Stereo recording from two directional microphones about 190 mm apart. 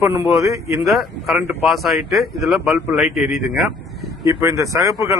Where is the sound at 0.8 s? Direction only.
Centre (ahead or behind).